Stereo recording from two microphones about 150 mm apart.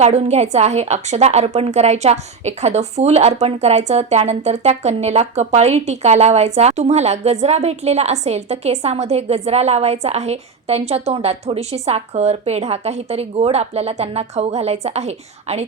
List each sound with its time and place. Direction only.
0.0 s a woman's voice: 45° right (ahead or behind)